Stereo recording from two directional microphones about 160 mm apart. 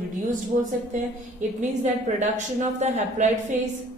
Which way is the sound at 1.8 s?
50° right (ahead or behind).